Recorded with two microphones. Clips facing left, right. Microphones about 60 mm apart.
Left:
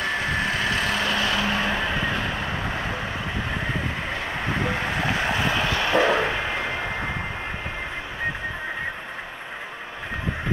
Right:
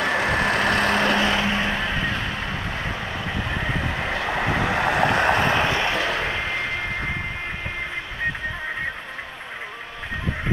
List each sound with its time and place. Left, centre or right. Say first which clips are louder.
0.0 s vehicle: right 4 dB; right
1.2 s vehicle: right 2 dB; right
1.5 s vehicle: right 1 dB; centre
1.8 s music: even; centre
2.3 s vehicle: left 1 dB; left
4.0 s vehicle: right 4 dB; right
5.6 s a sound: right 2 dB; right
5.9 s vehicle: left 5 dB; left
6.2 s a sound: even; centre